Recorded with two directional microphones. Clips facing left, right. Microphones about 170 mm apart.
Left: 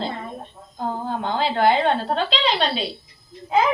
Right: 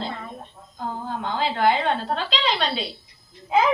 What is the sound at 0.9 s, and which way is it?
A woman's voice, 30° left (ahead or behind).